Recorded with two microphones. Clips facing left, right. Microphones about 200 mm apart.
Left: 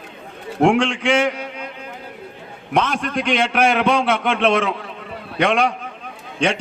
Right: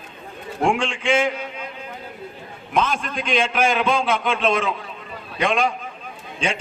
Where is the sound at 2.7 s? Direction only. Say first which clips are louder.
Left 3 dB; 70° left (ahead or behind).